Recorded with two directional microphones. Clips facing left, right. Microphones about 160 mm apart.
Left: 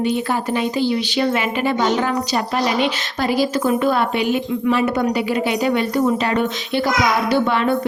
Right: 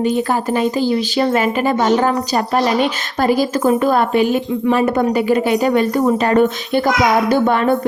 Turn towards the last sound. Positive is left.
turn(degrees=-45)  # may be behind; listen again after turning